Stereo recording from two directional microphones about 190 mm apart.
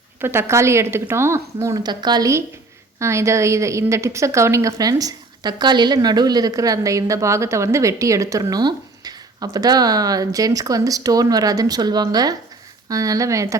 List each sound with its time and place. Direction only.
0.2 s a woman's voice: 10° right (ahead or behind)